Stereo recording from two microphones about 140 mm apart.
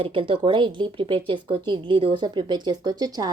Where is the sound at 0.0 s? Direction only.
35° right (ahead or behind).